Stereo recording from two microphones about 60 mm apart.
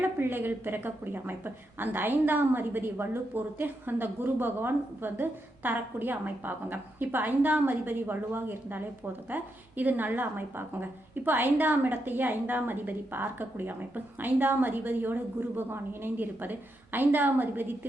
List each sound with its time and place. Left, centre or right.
0.0 s a woman's voice: right